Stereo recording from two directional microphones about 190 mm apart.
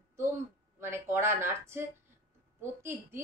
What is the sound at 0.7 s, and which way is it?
A woman's voice, 10° right (ahead or behind).